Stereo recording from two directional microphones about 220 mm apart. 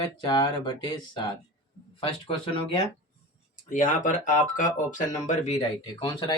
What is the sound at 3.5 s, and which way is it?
Speech, 35° left (ahead or behind).